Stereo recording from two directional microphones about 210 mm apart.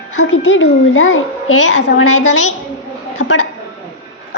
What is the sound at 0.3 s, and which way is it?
A child's voice, 65° left (ahead or behind).